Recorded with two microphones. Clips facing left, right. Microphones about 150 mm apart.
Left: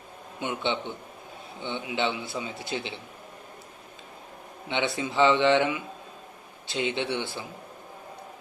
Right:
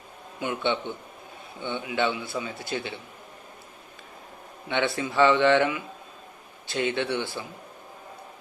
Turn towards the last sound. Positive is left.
turn(degrees=20)  # may be behind; listen again after turning